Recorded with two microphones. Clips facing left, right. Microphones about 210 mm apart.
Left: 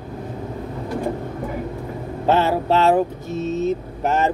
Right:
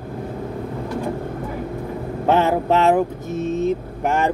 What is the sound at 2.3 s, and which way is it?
Music, 15° right (ahead or behind).